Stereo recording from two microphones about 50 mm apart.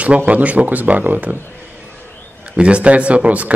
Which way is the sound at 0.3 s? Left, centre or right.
Right.